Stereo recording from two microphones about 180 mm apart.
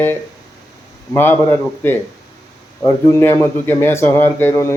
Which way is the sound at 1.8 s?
10° left (ahead or behind).